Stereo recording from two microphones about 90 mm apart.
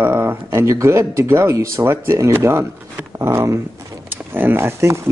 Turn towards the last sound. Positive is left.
turn(degrees=-30)  # may be behind; listen again after turning